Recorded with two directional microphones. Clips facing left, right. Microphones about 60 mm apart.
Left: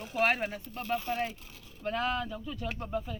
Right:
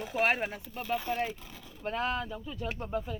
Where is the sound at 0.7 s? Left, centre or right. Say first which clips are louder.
Right 1 dB; centre.